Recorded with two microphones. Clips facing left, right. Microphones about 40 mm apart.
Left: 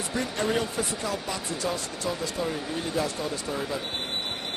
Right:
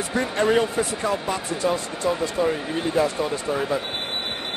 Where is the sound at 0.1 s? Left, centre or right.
Right.